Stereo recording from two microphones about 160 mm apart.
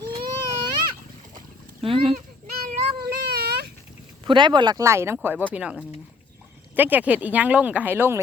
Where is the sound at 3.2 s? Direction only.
90° right.